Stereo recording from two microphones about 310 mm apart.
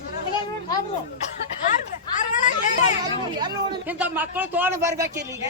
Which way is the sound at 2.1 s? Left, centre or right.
Left.